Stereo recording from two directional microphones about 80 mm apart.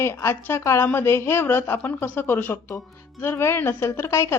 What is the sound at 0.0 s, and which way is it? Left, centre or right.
Speech, left.